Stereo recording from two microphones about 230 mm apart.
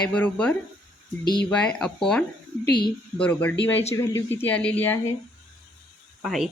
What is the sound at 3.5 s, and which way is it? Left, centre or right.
Speech, left.